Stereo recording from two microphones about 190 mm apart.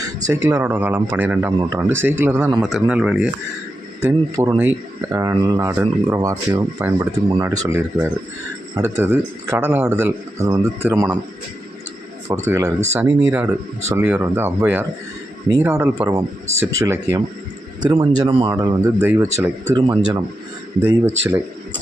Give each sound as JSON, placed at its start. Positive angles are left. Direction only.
{"t": 0.4, "sound": "a man's voice", "side_deg": -10}
{"t": 2.6, "sound": "a man's voice", "side_deg": 0}
{"t": 12.3, "sound": "a man's voice", "side_deg": -15}
{"t": 19.7, "sound": "speech", "side_deg": -20}